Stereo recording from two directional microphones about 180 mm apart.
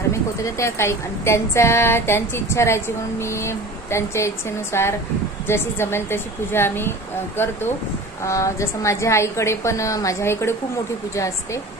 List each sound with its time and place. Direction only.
0.1 s a woman's voice: 15° left (ahead or behind)
8.3 s a woman's voice: 15° left (ahead or behind)